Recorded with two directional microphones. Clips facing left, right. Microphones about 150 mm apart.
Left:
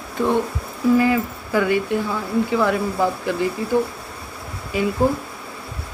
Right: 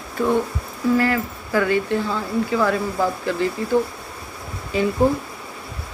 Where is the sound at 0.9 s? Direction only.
15° left (ahead or behind).